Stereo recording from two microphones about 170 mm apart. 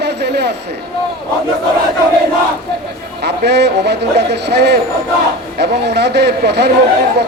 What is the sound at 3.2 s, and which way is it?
Speech, 80° right.